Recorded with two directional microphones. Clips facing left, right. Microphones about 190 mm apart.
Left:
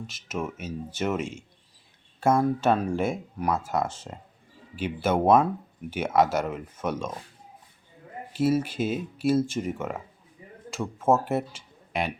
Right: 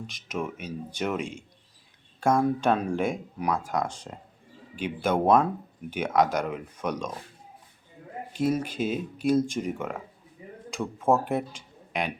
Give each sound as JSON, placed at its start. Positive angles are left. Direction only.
{"t": 0.1, "sound": "speech", "side_deg": 5}
{"t": 8.4, "sound": "speech", "side_deg": 5}